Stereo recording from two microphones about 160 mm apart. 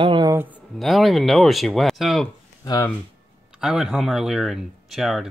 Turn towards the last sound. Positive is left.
turn(degrees=0)  # may be behind; listen again after turning